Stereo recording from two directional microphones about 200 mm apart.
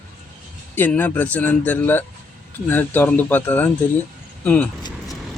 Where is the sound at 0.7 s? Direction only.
10° left (ahead or behind).